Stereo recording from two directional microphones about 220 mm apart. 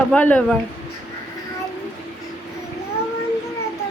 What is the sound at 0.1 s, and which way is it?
Speech, 5° left (ahead or behind).